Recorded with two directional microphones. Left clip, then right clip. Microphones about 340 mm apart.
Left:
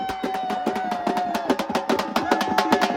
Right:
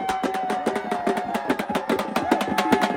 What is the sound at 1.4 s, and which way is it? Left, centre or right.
Music, centre.